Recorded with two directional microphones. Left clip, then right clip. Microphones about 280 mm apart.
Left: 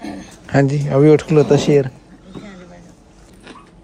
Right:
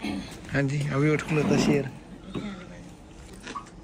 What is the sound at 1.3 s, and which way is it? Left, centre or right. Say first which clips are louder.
Speech: left 12 dB; left.